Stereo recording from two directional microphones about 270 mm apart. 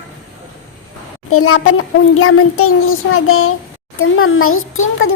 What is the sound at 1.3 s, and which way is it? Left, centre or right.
Child singing, left.